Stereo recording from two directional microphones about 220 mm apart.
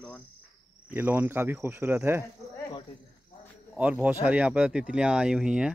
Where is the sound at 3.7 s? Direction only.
5° right (ahead or behind).